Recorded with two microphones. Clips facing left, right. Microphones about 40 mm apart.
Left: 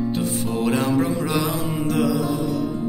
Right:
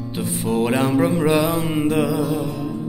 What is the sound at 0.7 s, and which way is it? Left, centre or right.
Music, right.